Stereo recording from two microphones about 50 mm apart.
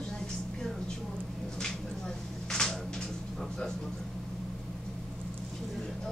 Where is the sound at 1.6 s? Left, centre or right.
Centre.